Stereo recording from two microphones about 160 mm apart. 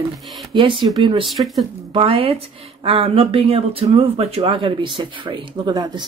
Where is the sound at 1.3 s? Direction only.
Centre (ahead or behind).